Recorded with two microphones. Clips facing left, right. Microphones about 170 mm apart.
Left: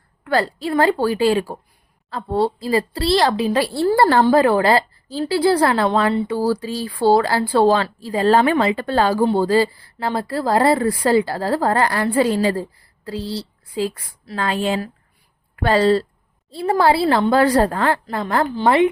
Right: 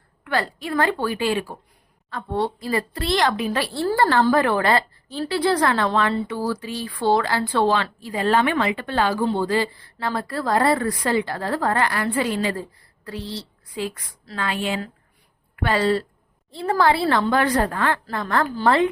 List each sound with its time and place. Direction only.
0.3 s speech: 35° left (ahead or behind)
3.7 s a woman's voice: 15° left (ahead or behind)
3.9 s a woman's voice: 35° left (ahead or behind)